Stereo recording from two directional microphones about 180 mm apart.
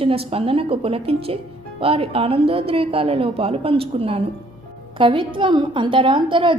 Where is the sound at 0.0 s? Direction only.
30° right (ahead or behind).